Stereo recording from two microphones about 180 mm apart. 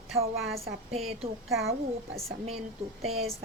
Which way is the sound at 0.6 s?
35° right (ahead or behind).